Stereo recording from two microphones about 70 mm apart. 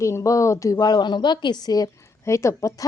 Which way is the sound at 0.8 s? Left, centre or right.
Left.